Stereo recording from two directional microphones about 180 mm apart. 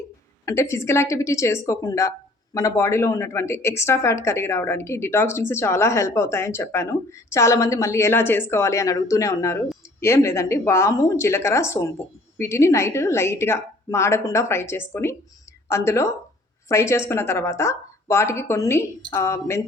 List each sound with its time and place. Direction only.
0.4 s a man's voice: 15° left (ahead or behind)